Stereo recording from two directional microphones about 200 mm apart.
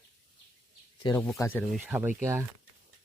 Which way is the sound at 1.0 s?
15° left (ahead or behind).